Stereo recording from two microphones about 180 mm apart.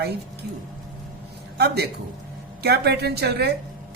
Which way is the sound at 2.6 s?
65° right (ahead or behind).